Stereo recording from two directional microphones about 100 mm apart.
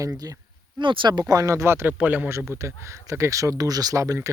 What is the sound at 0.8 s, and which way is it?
Speech, 55° right (ahead or behind).